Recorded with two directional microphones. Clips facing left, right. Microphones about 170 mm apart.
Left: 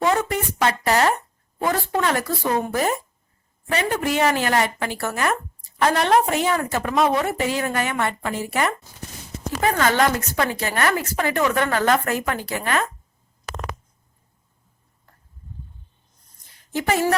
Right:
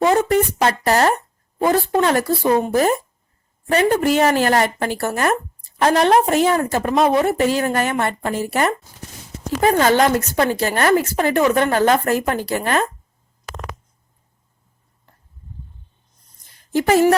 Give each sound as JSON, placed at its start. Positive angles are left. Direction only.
{"t": 0.0, "sound": "a sound", "side_deg": -30}
{"t": 1.6, "sound": "speech", "side_deg": -35}
{"t": 3.7, "sound": "a woman's voice", "side_deg": -40}
{"t": 16.7, "sound": "a woman's voice", "side_deg": -40}